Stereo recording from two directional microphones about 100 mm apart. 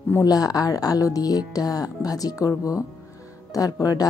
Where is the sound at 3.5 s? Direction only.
40° left (ahead or behind).